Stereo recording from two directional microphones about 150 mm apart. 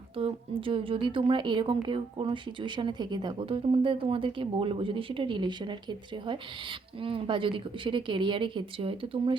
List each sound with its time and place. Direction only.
0.2 s a woman's voice: 35° right (ahead or behind)